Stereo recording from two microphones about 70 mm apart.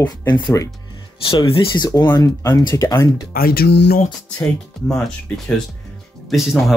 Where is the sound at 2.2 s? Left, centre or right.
Left.